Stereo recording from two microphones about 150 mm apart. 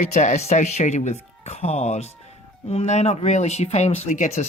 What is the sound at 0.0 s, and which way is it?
Speech, 55° left (ahead or behind).